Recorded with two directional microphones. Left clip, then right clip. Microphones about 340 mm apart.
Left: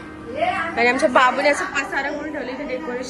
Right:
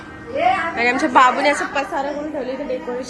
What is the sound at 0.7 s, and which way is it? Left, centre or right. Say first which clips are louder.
A woman's voice: left 2 dB; centre.